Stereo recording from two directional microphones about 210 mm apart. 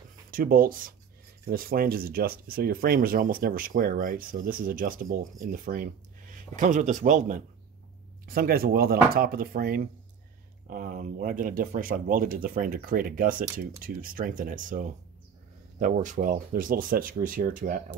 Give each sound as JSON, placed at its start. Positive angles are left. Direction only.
{"t": 0.3, "sound": "speech", "side_deg": -40}